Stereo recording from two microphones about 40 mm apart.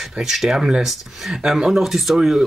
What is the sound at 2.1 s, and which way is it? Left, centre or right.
Speech, centre.